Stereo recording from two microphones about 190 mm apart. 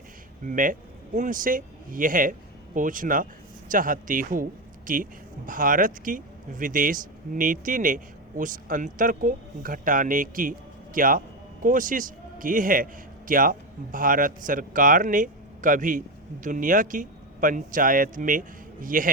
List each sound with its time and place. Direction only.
0.4 s a man's voice: 45° right (ahead or behind)